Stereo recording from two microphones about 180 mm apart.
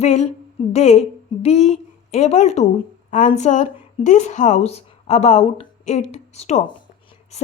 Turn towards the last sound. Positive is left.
turn(degrees=35)  # may be behind; listen again after turning